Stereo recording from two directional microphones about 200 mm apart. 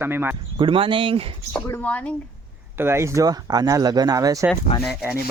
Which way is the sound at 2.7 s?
10° right (ahead or behind).